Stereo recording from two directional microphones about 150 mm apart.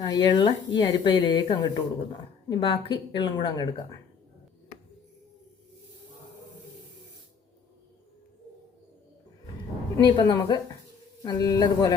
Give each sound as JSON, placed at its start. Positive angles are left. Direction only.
{"t": 0.0, "sound": "speech", "side_deg": 30}
{"t": 10.0, "sound": "a man's voice", "side_deg": 25}